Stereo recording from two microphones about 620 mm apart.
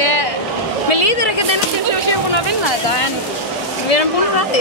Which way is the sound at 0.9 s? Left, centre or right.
Left.